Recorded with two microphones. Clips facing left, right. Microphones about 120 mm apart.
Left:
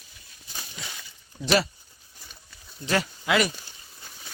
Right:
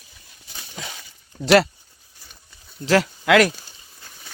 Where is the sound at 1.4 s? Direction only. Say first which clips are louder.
Right 8 dB; 70° right (ahead or behind).